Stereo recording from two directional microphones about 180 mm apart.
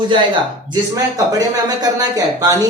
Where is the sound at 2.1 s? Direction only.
20° right (ahead or behind).